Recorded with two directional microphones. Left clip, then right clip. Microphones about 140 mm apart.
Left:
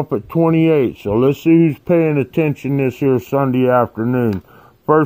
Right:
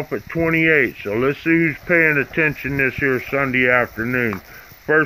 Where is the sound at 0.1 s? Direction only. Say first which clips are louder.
Left 3 dB; 25° right (ahead or behind).